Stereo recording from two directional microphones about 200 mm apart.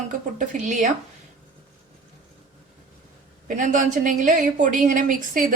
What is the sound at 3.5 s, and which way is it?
Speech, 40° right (ahead or behind).